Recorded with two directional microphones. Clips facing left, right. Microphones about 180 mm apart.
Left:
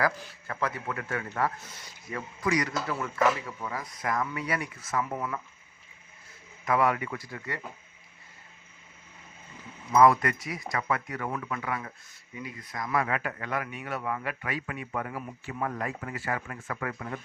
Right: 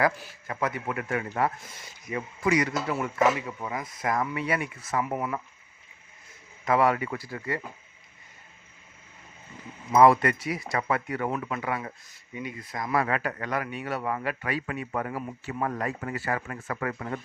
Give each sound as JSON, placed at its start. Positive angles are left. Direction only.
{"t": 0.0, "sound": "a man's voice", "side_deg": -20}
{"t": 6.7, "sound": "speech", "side_deg": -30}
{"t": 9.9, "sound": "a man's voice", "side_deg": -30}